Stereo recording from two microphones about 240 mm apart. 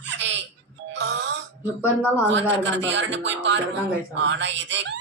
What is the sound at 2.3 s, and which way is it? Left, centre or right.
Speech, right.